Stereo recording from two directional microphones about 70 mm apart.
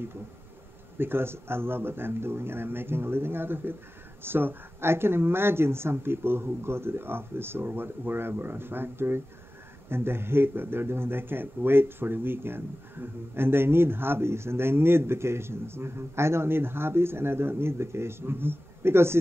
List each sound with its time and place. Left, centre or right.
0.9 s speech: right